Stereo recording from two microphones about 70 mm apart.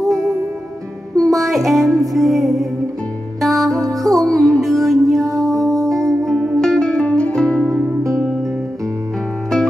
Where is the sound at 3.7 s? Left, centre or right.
Right.